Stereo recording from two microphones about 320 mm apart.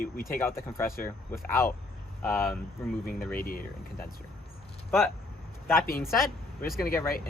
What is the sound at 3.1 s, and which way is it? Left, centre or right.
Speech, left.